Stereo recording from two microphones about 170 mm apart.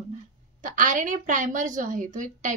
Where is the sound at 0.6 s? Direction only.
50° right (ahead or behind).